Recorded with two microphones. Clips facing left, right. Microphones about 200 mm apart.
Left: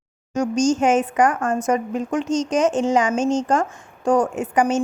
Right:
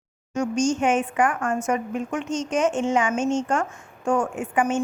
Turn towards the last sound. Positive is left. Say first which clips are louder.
# left 4 dB
turn(degrees=40)  # may be behind; listen again after turning